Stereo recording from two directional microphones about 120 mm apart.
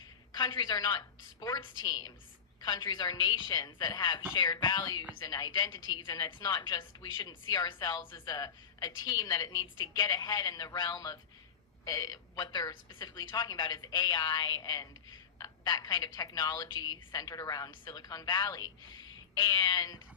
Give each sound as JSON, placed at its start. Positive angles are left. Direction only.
{"t": 0.3, "sound": "a woman's voice", "side_deg": 40}